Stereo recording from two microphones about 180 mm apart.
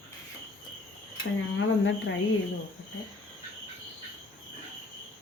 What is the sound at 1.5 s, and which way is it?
Speech, 80° left.